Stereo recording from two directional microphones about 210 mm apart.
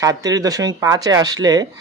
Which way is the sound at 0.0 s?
15° right (ahead or behind).